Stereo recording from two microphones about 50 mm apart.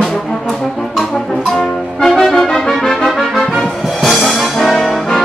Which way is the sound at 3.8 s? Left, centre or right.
Centre.